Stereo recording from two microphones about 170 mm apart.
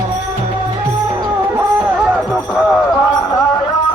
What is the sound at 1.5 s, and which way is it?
Music, 10° right (ahead or behind).